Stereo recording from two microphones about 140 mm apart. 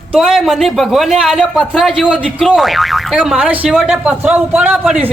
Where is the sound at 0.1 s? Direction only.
Centre (ahead or behind).